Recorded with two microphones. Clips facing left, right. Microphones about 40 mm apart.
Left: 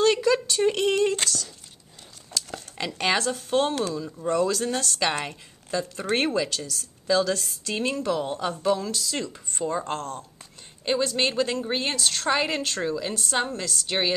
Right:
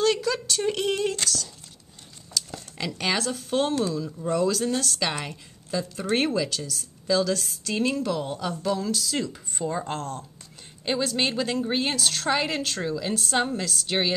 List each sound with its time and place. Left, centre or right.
0.0 s a sound: centre
2.3 s a woman's voice: centre
8.4 s a woman's voice: left
8.7 s a woman's voice: centre